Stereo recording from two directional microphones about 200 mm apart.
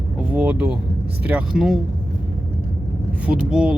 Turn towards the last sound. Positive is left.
turn(degrees=-5)  # may be behind; listen again after turning